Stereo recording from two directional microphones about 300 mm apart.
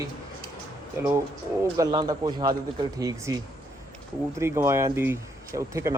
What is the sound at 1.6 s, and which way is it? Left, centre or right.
Speech, centre.